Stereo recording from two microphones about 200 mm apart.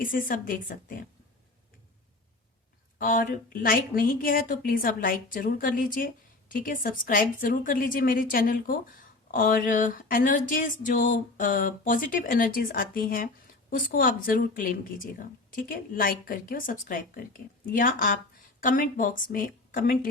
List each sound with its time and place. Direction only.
0.0 s a woman's voice: 45° left (ahead or behind)
3.0 s a woman's voice: 45° left (ahead or behind)